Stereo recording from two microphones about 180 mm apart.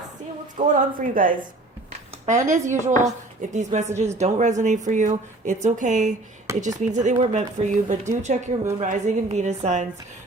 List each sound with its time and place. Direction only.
0.6 s a woman's voice: 35° right (ahead or behind)
0.9 s a woman's voice: 50° right (ahead or behind)